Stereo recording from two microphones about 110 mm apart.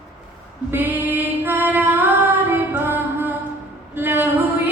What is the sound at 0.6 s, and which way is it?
Female singing, 20° right (ahead or behind).